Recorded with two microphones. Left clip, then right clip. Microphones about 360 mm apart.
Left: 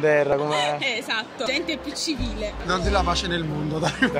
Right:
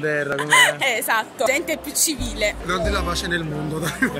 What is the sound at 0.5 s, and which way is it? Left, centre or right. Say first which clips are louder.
Speech: right 7 dB; right.